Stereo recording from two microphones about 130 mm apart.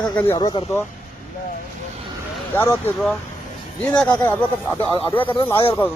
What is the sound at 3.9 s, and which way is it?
Speech, 10° left (ahead or behind).